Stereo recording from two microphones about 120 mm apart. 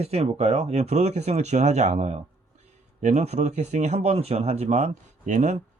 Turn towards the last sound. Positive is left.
turn(degrees=-75)  # may be behind; listen again after turning